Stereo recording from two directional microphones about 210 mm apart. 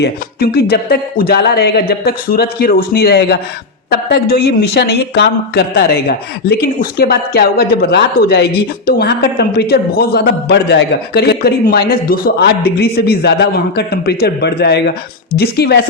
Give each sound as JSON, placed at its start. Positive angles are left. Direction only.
{"t": 0.0, "sound": "a man's voice", "side_deg": 45}